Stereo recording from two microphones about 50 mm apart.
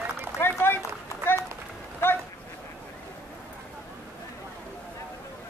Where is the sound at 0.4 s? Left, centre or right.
Left.